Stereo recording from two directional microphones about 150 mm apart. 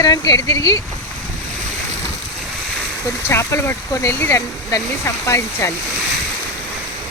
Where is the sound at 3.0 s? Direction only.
20° left (ahead or behind).